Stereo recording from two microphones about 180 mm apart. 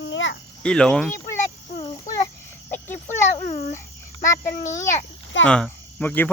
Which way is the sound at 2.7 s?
10° left (ahead or behind).